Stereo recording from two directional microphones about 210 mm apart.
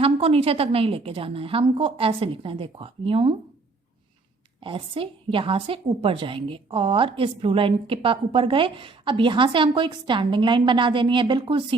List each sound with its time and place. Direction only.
0.0 s a woman's voice: 25° right (ahead or behind)
4.6 s a woman's voice: 25° right (ahead or behind)